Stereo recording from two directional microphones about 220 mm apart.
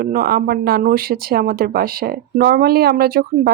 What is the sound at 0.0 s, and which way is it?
Speech, 40° right (ahead or behind).